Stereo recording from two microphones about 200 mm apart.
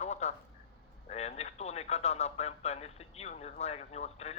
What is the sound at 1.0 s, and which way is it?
Radio, 30° left (ahead or behind).